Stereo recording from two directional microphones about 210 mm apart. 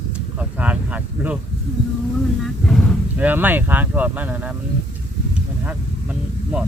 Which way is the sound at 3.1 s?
10° right (ahead or behind).